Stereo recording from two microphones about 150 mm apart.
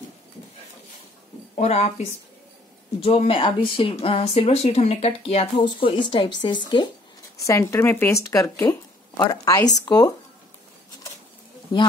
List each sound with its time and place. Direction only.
1.6 s speech: 50° left (ahead or behind); by 6.6 s 30° left (ahead or behind)
7.4 s speech: 20° left (ahead or behind)